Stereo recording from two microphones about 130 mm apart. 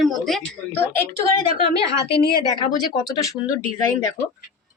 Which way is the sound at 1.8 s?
25° right (ahead or behind).